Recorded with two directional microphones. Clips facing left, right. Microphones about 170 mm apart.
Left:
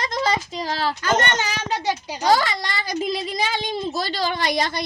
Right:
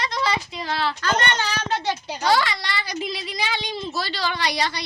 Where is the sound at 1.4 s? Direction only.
15° left (ahead or behind).